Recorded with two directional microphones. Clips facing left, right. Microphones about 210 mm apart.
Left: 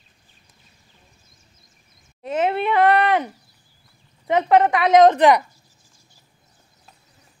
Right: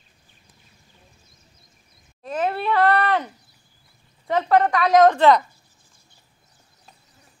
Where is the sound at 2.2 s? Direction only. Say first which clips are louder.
Left 3 dB; 20° left (ahead or behind).